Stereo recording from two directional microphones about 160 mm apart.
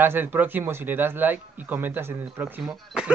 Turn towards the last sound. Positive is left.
turn(degrees=0)  # may be behind; listen again after turning